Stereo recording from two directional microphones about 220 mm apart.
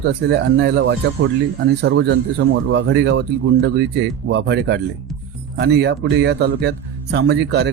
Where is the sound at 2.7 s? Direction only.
50° right (ahead or behind).